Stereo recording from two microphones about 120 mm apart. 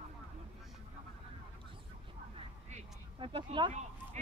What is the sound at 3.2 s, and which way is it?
Speech, 45° right (ahead or behind).